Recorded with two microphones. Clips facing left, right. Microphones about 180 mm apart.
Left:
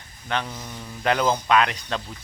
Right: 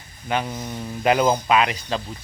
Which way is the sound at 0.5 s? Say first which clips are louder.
Right 6 dB; 20° right (ahead or behind).